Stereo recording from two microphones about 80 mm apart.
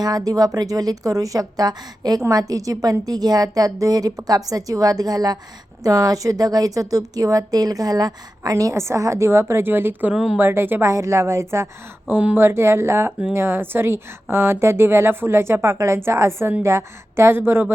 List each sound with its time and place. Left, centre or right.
0.0 s a woman's voice: right
12.0 s a woman's voice: right